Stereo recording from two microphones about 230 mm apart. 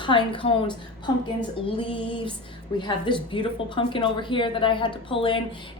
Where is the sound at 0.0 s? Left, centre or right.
Left.